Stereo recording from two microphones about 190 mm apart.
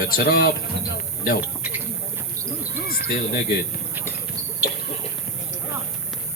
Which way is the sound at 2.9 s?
50° left (ahead or behind).